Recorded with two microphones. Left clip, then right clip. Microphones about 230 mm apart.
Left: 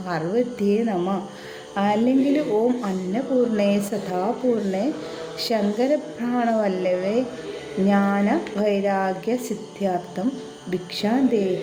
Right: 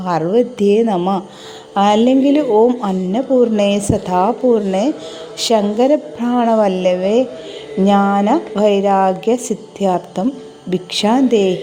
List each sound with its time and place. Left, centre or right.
0.0 s a woman's voice: right
5.4 s a woman's voice: right